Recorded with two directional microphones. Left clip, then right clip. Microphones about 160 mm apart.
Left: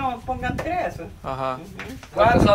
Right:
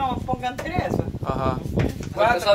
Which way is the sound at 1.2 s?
20° right (ahead or behind).